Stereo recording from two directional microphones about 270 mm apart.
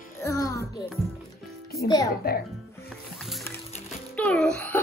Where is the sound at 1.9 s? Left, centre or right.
Centre.